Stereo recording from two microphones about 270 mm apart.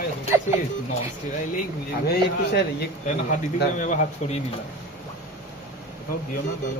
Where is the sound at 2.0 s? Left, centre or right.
Left.